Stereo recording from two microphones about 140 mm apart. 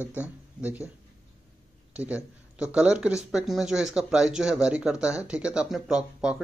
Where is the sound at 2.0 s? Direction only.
10° right (ahead or behind).